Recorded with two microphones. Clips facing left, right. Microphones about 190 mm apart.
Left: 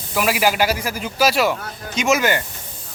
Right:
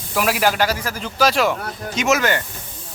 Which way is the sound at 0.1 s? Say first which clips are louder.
Even; centre (ahead or behind).